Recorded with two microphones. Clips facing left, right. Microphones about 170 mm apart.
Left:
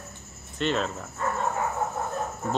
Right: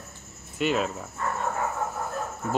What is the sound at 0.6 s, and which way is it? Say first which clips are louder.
Speech: right 1 dB; 10° right (ahead or behind).